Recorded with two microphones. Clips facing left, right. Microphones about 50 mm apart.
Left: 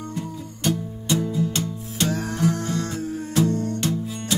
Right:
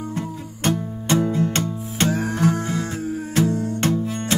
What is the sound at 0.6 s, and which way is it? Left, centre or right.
Music, right.